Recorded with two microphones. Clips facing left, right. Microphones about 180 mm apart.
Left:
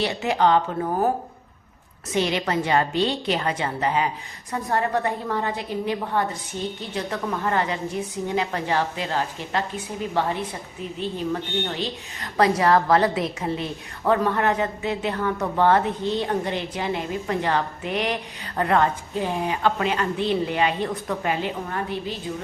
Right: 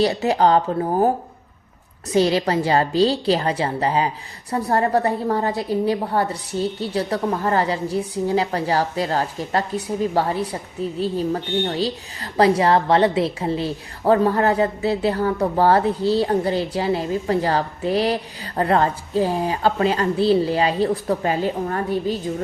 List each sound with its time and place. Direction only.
0.0 s a woman's voice: 35° right (ahead or behind)
2.1 s a woman's voice: 35° right (ahead or behind)